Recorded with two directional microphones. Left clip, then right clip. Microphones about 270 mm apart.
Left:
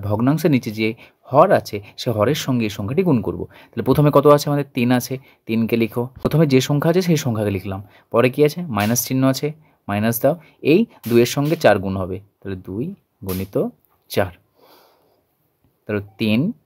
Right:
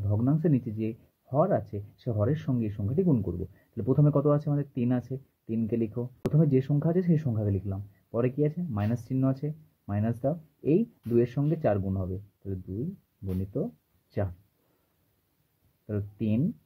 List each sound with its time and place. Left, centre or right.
0.1 s speech: left
15.9 s speech: left